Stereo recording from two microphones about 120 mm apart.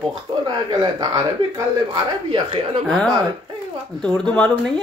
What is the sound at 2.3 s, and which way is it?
Speech, 45° right (ahead or behind).